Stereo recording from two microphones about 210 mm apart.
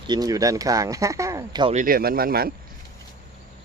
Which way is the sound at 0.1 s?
15° right (ahead or behind).